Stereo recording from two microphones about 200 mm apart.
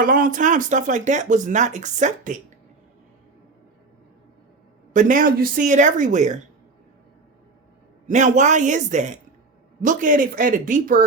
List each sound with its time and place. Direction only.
0.0 s speech: 45° right (ahead or behind)
4.9 s speech: 40° right (ahead or behind)
8.0 s speech: 35° right (ahead or behind)